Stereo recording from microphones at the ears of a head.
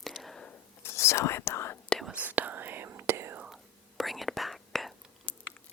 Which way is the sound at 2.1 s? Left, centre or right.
Right.